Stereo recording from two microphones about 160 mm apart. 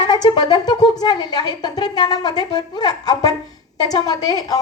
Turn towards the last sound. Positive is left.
turn(degrees=25)  # may be behind; listen again after turning